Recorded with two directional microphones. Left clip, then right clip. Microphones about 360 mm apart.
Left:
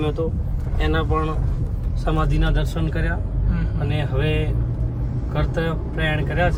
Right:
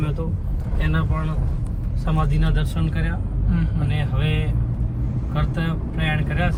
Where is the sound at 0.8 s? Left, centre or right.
Left.